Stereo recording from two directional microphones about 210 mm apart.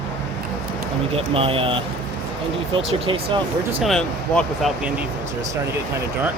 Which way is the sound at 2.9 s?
25° right (ahead or behind).